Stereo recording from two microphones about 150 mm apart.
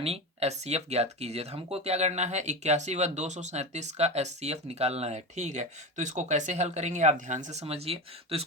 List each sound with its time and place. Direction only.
0.0 s speech: 45° right (ahead or behind)